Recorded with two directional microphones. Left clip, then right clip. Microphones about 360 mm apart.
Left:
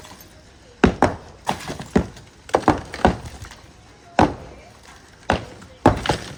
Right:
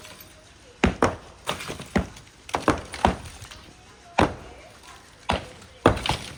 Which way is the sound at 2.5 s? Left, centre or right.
Left.